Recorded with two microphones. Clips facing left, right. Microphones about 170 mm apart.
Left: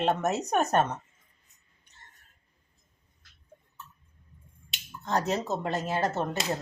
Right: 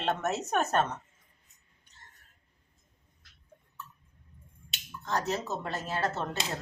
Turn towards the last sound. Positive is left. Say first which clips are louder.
# left 4 dB
turn(degrees=15)  # may be behind; listen again after turning